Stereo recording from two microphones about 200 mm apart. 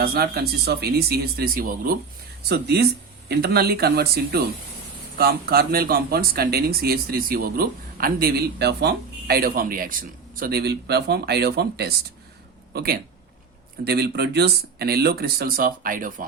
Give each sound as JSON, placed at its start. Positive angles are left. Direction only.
{"t": 0.0, "sound": "speech", "side_deg": -50}